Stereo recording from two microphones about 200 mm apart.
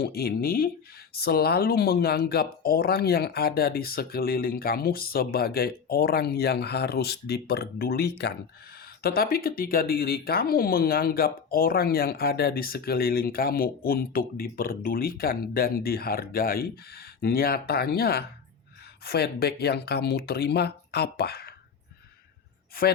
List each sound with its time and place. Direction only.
0.0 s speech: 50° left (ahead or behind)